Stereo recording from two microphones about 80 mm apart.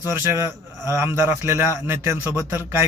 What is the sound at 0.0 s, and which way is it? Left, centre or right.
Speech, right.